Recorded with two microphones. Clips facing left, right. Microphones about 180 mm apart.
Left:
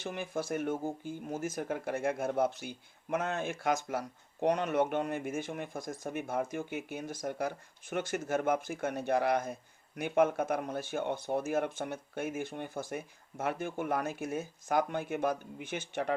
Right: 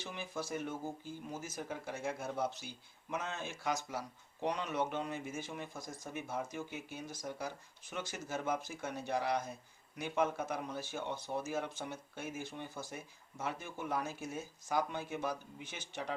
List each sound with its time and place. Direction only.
0.0 s speech: 55° left (ahead or behind)